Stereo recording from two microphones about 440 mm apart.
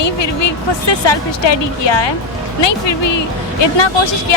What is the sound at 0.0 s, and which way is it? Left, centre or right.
Speech, left.